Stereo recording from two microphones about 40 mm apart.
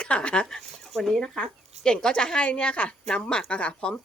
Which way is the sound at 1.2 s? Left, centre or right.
Left.